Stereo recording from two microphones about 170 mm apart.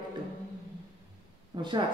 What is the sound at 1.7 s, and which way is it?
Speech, 25° right (ahead or behind).